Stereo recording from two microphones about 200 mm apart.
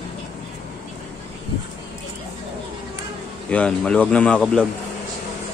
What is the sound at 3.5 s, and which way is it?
Speech, 5° left (ahead or behind).